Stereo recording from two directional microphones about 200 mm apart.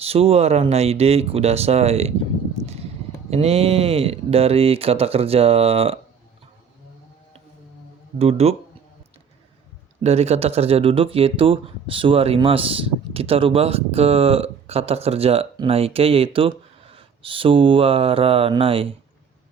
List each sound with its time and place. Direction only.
0.0 s speech: 30° right (ahead or behind)
3.2 s speech: 30° right (ahead or behind)
8.2 s speech: 30° right (ahead or behind)
10.0 s speech: 30° right (ahead or behind)